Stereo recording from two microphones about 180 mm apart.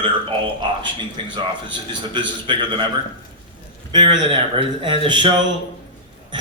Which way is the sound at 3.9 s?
25° right (ahead or behind).